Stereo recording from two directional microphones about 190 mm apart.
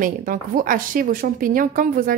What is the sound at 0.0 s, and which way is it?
A woman's voice, 45° right (ahead or behind).